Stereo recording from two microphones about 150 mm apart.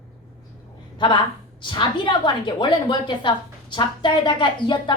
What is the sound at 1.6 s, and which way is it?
A woman's voice, 30° left (ahead or behind).